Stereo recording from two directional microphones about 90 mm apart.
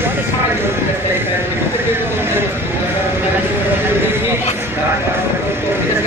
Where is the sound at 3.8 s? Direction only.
25° right (ahead or behind).